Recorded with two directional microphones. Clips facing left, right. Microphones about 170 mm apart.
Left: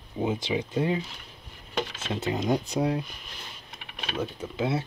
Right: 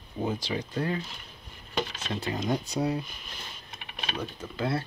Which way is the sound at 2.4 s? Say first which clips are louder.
Left 3 dB; 15° left (ahead or behind).